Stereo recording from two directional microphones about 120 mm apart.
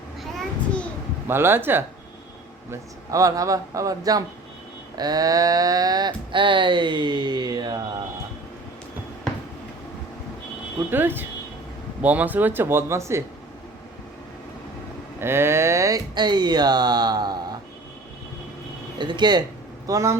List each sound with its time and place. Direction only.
0.2 s a sound: 5° left (ahead or behind)
1.3 s speech: 20° right (ahead or behind)
3.1 s speech: 30° right (ahead or behind)
10.9 s speech: 15° right (ahead or behind)
15.2 s speech: 20° right (ahead or behind); by 17.6 s 35° right (ahead or behind)
18.9 s speech: 40° right (ahead or behind)
19.9 s speech: 25° right (ahead or behind)